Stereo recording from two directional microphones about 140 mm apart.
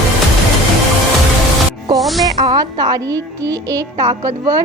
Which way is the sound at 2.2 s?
30° right (ahead or behind).